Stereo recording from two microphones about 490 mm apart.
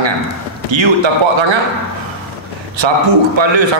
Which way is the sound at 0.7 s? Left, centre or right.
Right.